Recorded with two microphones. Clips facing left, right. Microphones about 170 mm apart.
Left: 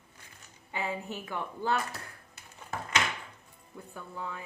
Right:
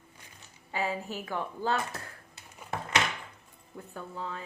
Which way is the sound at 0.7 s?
20° left (ahead or behind).